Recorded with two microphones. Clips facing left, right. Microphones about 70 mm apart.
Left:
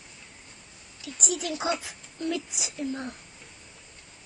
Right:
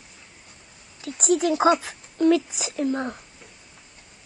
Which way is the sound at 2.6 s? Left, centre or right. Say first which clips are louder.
Right 7 dB; right.